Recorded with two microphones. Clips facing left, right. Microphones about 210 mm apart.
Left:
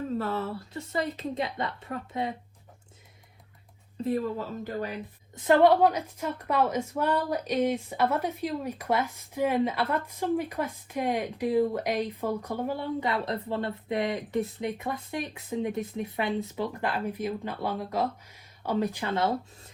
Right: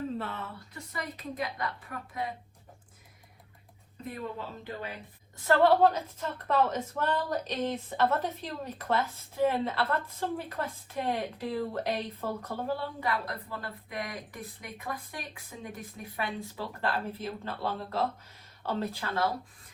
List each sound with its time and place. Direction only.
0.2 s a woman's voice: 40° left (ahead or behind)
4.0 s speech: 35° left (ahead or behind)
5.4 s a woman's voice: 15° left (ahead or behind)